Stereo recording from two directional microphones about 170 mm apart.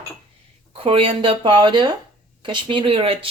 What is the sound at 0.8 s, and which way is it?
Speech, 35° right (ahead or behind).